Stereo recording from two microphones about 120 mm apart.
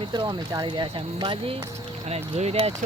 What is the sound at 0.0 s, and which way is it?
Speech, 35° right (ahead or behind).